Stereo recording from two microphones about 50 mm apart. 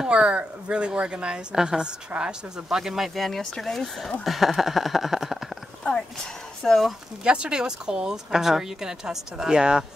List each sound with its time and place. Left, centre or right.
0.0 s a woman's voice: right
2.7 s speech: centre
3.3 s speech: centre
6.6 s speech: centre
7.2 s a woman's voice: centre